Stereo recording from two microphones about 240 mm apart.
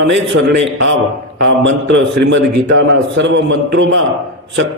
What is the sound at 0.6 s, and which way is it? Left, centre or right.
A man's voice, right.